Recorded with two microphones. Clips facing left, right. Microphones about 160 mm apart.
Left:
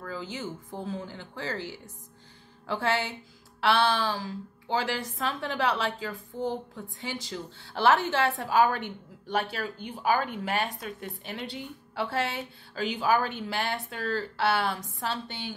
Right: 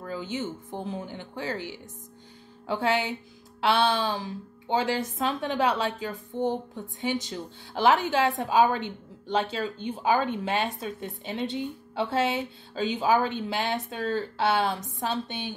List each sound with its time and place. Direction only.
0.0 s a woman's voice: 20° right (ahead or behind)